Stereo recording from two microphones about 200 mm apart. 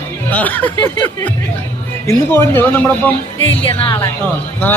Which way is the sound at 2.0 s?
10° left (ahead or behind).